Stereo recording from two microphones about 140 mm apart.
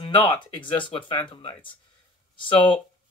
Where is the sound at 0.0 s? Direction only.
35° left (ahead or behind).